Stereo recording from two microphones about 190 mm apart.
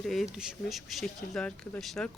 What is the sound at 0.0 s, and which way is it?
Speech, centre (ahead or behind).